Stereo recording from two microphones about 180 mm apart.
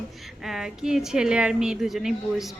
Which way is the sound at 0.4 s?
Centre (ahead or behind).